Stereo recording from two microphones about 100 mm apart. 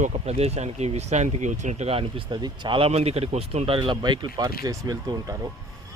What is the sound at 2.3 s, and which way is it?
A man's voice, 50° right (ahead or behind).